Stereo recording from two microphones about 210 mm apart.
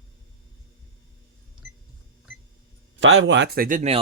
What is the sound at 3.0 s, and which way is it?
Speech, 65° right (ahead or behind).